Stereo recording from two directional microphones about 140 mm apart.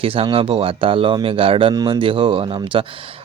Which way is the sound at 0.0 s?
40° right (ahead or behind).